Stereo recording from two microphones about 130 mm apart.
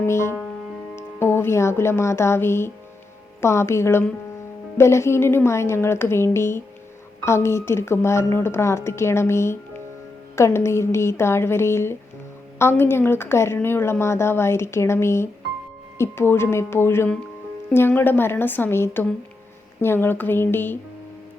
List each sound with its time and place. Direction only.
0.0 s a woman's voice: 20° left (ahead or behind)